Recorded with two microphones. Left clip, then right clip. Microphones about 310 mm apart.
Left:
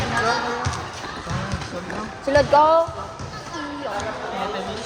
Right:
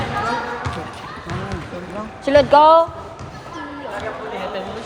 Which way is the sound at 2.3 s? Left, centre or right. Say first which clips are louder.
Right 5 dB; right.